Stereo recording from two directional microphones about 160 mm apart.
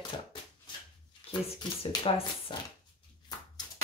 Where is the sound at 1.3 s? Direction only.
35° left (ahead or behind).